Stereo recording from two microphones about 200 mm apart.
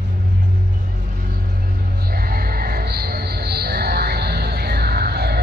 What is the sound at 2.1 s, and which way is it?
Music, 50° right (ahead or behind).